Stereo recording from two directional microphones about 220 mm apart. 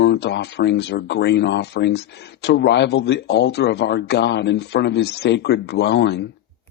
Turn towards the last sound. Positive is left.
turn(degrees=50)  # may be behind; listen again after turning